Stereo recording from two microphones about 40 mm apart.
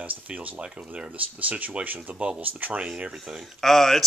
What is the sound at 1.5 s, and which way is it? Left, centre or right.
Speech, right.